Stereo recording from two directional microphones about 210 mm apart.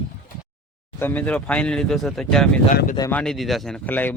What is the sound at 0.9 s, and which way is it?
Speech, 10° left (ahead or behind).